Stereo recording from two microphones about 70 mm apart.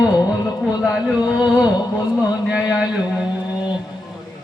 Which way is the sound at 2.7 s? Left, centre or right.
Centre.